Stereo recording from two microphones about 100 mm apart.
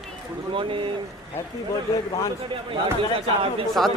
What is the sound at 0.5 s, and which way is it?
Speech, 60° right (ahead or behind).